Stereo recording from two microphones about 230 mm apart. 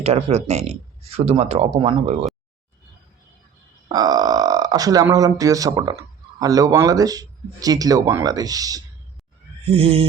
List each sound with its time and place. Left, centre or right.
0.0 s speech: right
3.8 s speech: centre